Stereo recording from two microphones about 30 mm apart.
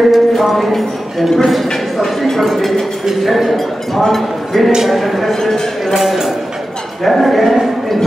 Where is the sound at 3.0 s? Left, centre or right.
Centre.